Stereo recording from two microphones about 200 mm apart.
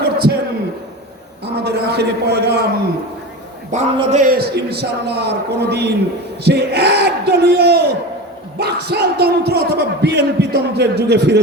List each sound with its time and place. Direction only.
0.0 s a sound: 50° right (ahead or behind)
1.5 s a man's voice: 55° right (ahead or behind)
3.9 s a man's voice: 35° right (ahead or behind); by 11.3 s 55° right (ahead or behind)